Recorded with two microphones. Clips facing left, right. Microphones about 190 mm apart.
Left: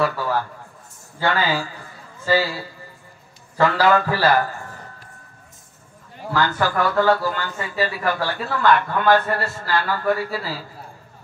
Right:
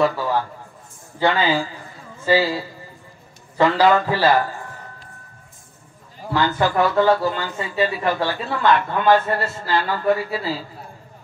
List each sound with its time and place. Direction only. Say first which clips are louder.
1.2 s speech: right 3 dB; 20° right (ahead or behind)
6.3 s speech: right 2 dB; 20° right (ahead or behind)